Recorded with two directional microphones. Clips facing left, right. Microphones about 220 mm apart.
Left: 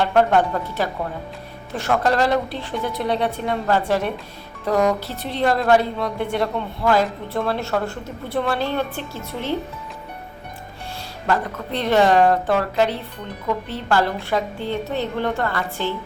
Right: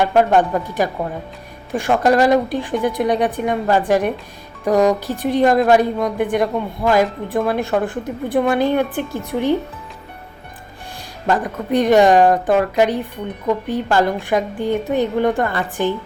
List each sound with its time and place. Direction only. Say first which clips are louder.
0.0 s a woman's voice: right 3 dB; 10° right (ahead or behind)
11.3 s a woman's voice: right 5 dB; 15° right (ahead or behind)